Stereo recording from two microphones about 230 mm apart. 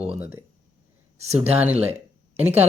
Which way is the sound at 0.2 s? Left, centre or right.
Centre.